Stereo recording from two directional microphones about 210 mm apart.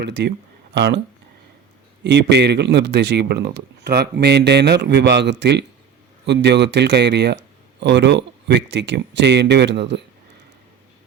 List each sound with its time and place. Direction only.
0.0 s speech: 55° right (ahead or behind)
2.0 s speech: 55° right (ahead or behind)